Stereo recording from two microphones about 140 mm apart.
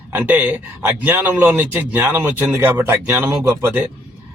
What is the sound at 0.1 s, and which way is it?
Speech, 10° right (ahead or behind).